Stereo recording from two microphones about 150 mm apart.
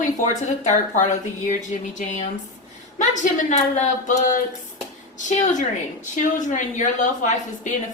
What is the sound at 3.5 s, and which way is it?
Speech, 50° left (ahead or behind).